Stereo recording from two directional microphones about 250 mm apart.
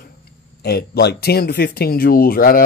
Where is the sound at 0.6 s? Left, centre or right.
Left.